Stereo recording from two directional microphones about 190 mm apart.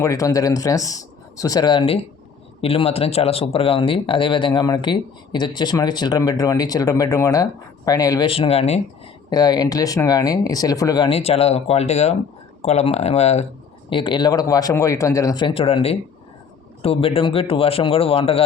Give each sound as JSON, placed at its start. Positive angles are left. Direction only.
{"t": 0.0, "sound": "speech", "side_deg": 15}
{"t": 8.3, "sound": "a man's voice", "side_deg": 30}
{"t": 9.3, "sound": "a man's voice", "side_deg": 20}
{"t": 13.9, "sound": "a man's voice", "side_deg": 25}